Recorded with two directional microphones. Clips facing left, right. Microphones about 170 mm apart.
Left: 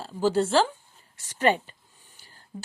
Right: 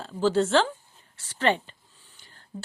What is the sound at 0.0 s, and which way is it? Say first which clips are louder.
A woman's voice: even; 10° left (ahead or behind).